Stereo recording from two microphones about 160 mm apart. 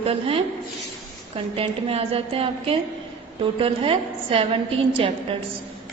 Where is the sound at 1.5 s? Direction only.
35° right (ahead or behind).